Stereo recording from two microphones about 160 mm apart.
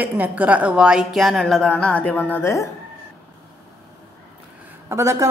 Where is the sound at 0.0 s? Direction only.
10° right (ahead or behind); by 2.7 s 20° left (ahead or behind).